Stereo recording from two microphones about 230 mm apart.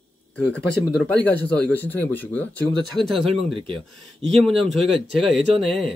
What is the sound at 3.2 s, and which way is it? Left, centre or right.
Speech, right.